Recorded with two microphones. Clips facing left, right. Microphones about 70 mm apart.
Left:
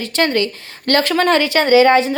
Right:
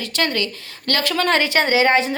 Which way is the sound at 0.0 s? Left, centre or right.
Left.